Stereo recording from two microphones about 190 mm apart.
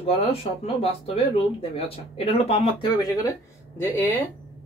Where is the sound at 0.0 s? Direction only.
30° left (ahead or behind).